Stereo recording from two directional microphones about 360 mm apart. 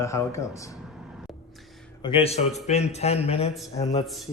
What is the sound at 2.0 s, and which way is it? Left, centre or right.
Speech, centre.